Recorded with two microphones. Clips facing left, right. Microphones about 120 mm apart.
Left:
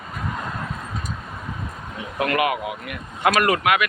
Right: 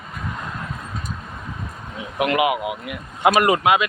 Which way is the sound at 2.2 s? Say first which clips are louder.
Right 2 dB; 15° right (ahead or behind).